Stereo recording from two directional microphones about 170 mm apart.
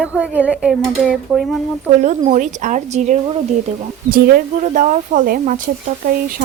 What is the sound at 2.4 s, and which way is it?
Speech, 50° right (ahead or behind).